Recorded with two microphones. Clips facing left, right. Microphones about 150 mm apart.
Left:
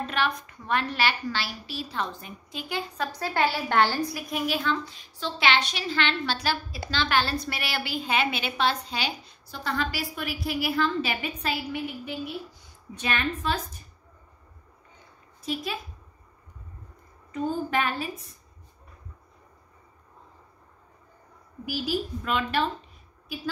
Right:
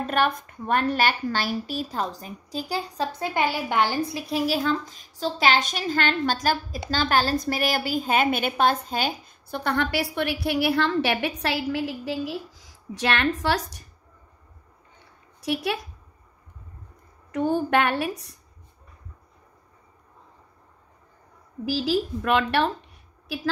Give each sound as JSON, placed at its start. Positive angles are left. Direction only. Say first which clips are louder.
{"t": 0.0, "sound": "a woman's voice", "louder": "right 4 dB", "side_deg": -50}
{"t": 3.1, "sound": "a woman's voice", "louder": "left 1 dB", "side_deg": -20}
{"t": 4.0, "sound": "a woman's voice", "louder": "right 3 dB", "side_deg": -25}
{"t": 15.4, "sound": "a woman's voice", "louder": "right 5 dB", "side_deg": -70}
{"t": 17.3, "sound": "a woman's voice", "louder": "right 6 dB", "side_deg": -75}
{"t": 21.6, "sound": "a woman's voice", "louder": "right 5 dB", "side_deg": -90}